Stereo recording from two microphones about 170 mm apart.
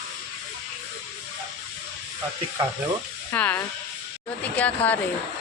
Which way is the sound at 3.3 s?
10° left (ahead or behind).